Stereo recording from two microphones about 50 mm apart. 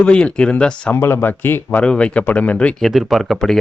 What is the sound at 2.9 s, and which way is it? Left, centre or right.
Speech, centre.